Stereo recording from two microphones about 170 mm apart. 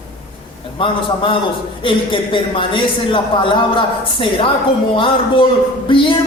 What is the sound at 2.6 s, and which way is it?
A man's voice, 30° left (ahead or behind).